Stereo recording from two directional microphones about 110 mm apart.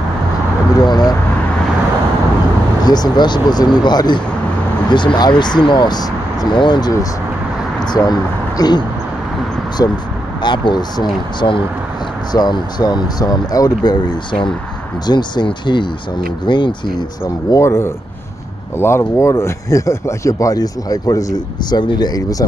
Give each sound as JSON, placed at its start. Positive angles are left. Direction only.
{"t": 0.7, "sound": "speech", "side_deg": 40}
{"t": 2.8, "sound": "speech", "side_deg": 40}
{"t": 17.5, "sound": "speech", "side_deg": 25}